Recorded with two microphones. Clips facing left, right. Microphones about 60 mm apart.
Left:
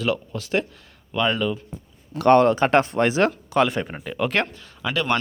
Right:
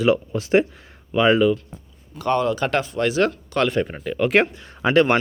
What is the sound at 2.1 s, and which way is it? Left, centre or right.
Speech, left.